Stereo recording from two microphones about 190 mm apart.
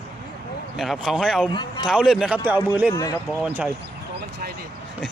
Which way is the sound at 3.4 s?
10° right (ahead or behind).